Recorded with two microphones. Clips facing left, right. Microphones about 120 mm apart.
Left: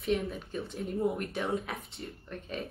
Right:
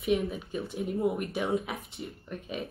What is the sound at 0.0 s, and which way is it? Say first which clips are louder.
Speech: right 3 dB; 10° right (ahead or behind).